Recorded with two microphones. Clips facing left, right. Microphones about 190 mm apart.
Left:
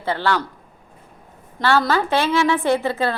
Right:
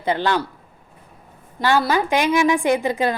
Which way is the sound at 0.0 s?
15° right (ahead or behind).